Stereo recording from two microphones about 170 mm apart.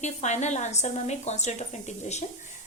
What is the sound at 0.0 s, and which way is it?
A woman's voice, 45° left (ahead or behind).